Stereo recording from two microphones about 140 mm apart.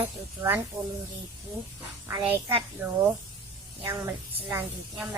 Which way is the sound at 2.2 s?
15° right (ahead or behind).